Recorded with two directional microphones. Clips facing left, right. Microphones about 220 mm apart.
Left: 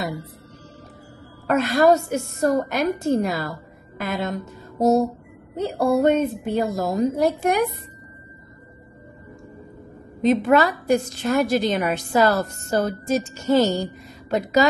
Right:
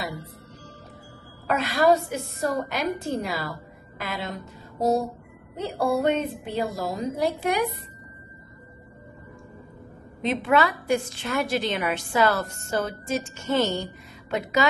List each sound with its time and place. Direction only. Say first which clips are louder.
1.5 s a woman's voice: left 4 dB; 45° left (ahead or behind)
4.0 s music: left 6 dB; 45° left (ahead or behind)
5.6 s a woman's voice: left 5 dB; 45° left (ahead or behind)
10.2 s a woman's voice: left 5 dB; 40° left (ahead or behind)